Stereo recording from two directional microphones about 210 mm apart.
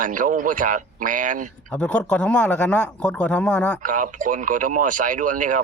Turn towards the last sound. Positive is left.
turn(degrees=-40)  # may be behind; listen again after turning